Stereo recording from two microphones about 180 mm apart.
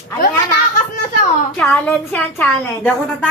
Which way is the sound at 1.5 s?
10° left (ahead or behind).